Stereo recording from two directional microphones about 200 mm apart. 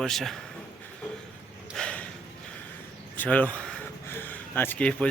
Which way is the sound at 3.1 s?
10° left (ahead or behind).